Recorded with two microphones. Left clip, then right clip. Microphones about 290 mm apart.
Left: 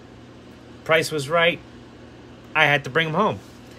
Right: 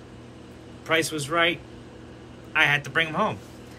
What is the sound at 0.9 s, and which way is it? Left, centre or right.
Speech, centre.